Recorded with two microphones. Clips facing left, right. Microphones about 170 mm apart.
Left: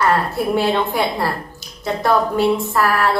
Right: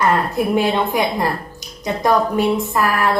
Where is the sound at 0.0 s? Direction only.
15° right (ahead or behind).